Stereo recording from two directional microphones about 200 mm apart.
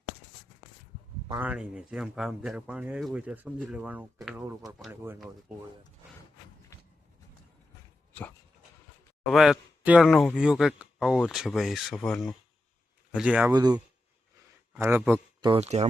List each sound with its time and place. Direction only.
1.4 s speech: 5° right (ahead or behind)
9.3 s speech: centre (ahead or behind)
13.5 s a man's voice: 20° right (ahead or behind)
15.4 s speech: 25° right (ahead or behind)